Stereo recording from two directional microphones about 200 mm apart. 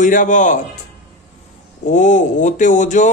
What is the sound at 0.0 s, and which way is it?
Speech, 40° left (ahead or behind).